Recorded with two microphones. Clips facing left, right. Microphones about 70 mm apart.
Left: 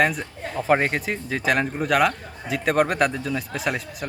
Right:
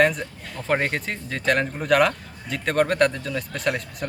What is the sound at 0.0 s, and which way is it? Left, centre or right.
A man's voice, centre.